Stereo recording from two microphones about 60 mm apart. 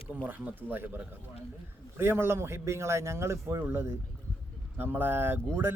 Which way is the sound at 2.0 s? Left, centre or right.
Right.